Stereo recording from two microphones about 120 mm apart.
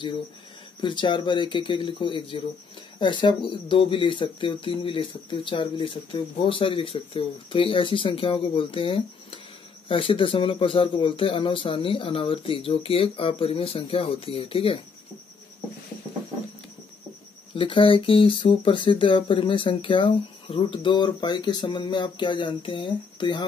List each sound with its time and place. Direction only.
0.7 s speech: 40° left (ahead or behind)
17.6 s speech: 45° left (ahead or behind)